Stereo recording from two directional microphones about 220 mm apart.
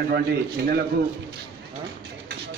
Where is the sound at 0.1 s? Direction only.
45° right (ahead or behind).